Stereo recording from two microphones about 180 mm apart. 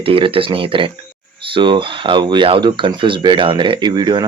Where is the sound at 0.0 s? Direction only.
30° right (ahead or behind).